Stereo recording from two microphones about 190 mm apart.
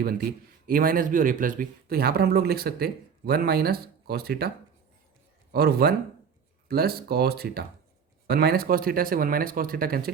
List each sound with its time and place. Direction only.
0.0 s a man's voice: 55° right (ahead or behind)